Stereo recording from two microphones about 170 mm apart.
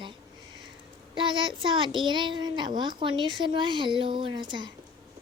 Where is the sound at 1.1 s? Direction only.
30° right (ahead or behind).